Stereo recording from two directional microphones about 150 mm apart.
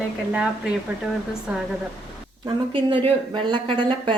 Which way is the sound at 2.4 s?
35° right (ahead or behind).